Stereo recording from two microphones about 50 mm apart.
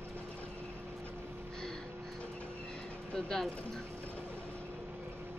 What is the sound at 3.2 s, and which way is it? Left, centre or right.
Speech, centre.